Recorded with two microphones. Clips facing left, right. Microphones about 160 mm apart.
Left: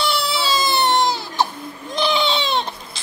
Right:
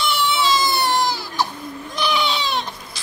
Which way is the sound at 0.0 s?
35° left (ahead or behind).